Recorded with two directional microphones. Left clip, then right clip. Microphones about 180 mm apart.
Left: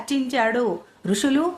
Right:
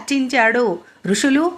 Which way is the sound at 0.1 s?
15° right (ahead or behind).